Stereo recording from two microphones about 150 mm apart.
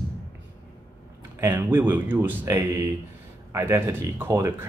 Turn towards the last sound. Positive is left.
turn(degrees=-15)  # may be behind; listen again after turning